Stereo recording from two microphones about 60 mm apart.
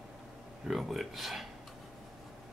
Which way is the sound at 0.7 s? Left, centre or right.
Centre.